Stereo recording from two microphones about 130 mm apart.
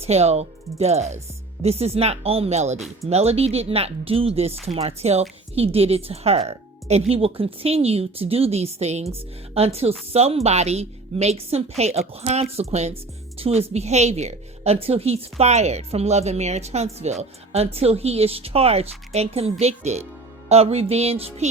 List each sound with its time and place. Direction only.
0.0 s a woman's voice: 55° right (ahead or behind)